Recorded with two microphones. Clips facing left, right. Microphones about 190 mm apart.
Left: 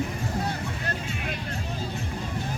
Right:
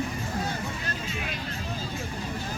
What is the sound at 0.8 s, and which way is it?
Vehicle, 60° left (ahead or behind).